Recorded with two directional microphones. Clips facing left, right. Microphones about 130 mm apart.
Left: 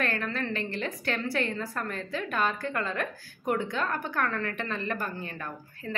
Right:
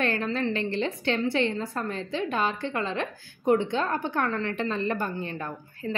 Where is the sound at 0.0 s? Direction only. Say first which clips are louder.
Right 4 dB; 30° right (ahead or behind).